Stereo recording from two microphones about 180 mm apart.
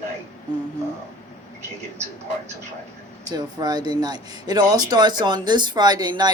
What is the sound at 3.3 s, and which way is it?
Speech, 20° right (ahead or behind).